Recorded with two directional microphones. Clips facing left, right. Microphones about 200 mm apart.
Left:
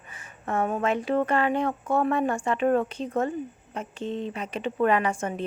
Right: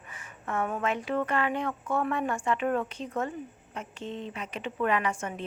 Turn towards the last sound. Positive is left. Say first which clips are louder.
# left 4 dB
turn(degrees=35)  # may be behind; listen again after turning